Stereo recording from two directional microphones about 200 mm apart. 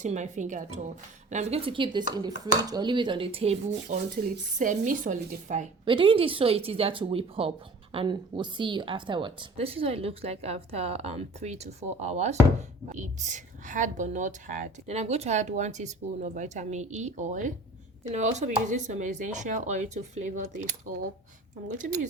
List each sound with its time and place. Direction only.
0.0 s a woman's voice: 35° right (ahead or behind)
5.8 s a woman's voice: 25° right (ahead or behind)
21.7 s a woman's voice: 40° right (ahead or behind)